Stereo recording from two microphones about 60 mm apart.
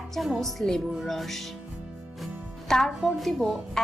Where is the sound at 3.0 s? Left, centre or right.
Centre.